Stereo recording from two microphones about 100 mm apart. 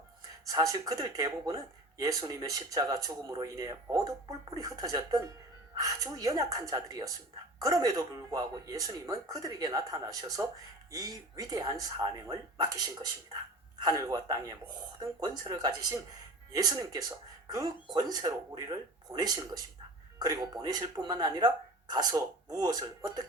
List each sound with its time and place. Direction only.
0.4 s speech: 35° right (ahead or behind)